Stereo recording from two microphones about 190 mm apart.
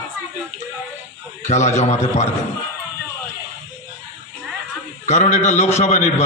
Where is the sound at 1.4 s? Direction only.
40° left (ahead or behind).